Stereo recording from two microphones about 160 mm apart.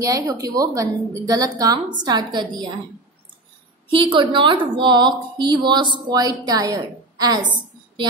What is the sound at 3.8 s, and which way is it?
A woman's voice, 30° right (ahead or behind).